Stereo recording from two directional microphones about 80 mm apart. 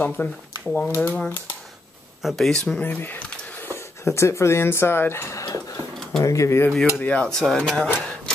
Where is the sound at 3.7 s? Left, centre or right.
Left.